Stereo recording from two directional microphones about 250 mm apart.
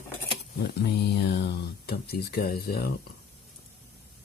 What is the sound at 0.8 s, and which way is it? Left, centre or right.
Speech, left.